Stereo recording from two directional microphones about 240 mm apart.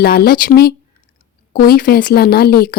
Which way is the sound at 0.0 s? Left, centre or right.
Left.